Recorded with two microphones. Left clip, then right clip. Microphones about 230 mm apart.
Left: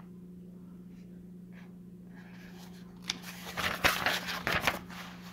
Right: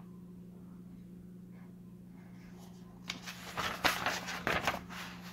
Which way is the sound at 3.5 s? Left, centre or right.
Left.